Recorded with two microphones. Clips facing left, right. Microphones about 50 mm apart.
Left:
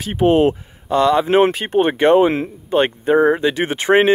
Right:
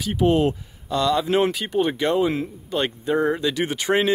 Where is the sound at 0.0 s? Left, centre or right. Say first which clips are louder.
Left 5 dB; left.